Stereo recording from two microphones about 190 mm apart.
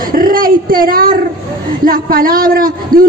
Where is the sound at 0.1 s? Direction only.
50° right (ahead or behind).